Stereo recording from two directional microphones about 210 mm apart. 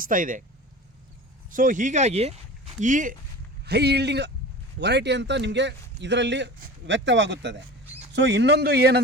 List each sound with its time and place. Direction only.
0.0 s speech: 40° right (ahead or behind)
1.5 s speech: 40° right (ahead or behind)
3.7 s speech: 50° right (ahead or behind)